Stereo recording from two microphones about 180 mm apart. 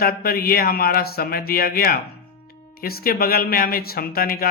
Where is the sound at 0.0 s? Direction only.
60° left (ahead or behind).